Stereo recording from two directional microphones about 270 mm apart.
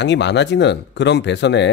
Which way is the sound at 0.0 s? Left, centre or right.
Left.